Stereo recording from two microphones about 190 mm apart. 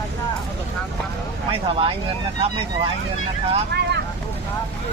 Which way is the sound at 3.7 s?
65° right (ahead or behind).